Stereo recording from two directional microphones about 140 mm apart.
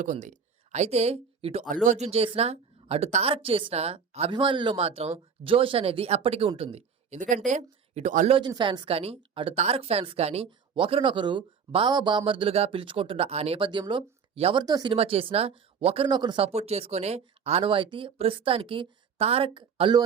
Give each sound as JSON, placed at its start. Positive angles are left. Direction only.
{"t": 0.0, "sound": "speech", "side_deg": -65}
{"t": 1.6, "sound": "speech", "side_deg": -70}
{"t": 8.3, "sound": "speech", "side_deg": -35}
{"t": 13.7, "sound": "speech", "side_deg": -35}
{"t": 14.6, "sound": "speech", "side_deg": -30}
{"t": 14.9, "sound": "speech", "side_deg": -40}
{"t": 16.0, "sound": "speech", "side_deg": -30}
{"t": 16.5, "sound": "speech", "side_deg": -50}